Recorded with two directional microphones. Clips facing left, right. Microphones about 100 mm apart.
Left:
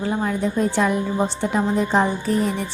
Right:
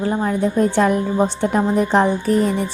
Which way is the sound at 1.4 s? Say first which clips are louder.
Right 3 dB; 55° right (ahead or behind).